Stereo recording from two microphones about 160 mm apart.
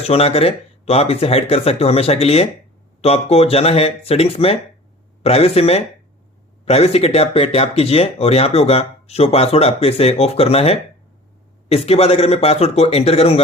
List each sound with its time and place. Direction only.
0.0 s speech: 40° left (ahead or behind)